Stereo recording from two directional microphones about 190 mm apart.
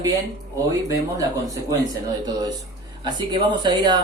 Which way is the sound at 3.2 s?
25° right (ahead or behind).